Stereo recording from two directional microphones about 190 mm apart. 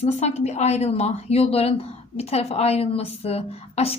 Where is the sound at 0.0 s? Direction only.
35° left (ahead or behind).